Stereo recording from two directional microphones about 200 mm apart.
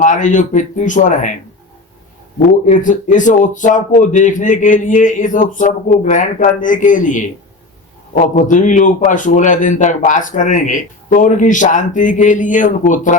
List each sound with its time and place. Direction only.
0.0 s a man's voice: 40° left (ahead or behind)
2.6 s a man's voice: 40° left (ahead or behind)